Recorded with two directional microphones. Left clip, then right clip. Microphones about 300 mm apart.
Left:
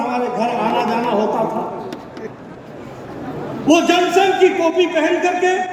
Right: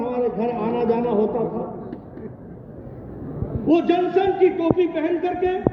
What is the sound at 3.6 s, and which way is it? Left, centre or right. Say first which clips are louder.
A man's voice: left 5 dB; left.